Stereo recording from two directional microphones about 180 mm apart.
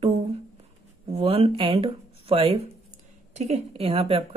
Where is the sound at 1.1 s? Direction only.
30° right (ahead or behind).